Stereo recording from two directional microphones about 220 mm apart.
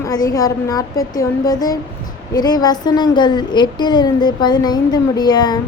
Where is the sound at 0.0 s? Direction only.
15° left (ahead or behind).